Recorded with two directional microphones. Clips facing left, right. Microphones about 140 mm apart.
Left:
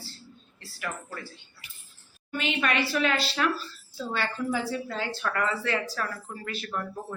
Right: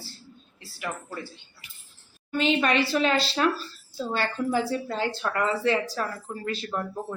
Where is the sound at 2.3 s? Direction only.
30° right (ahead or behind).